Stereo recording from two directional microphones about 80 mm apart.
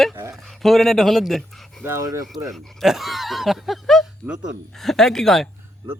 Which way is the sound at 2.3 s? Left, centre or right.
Centre.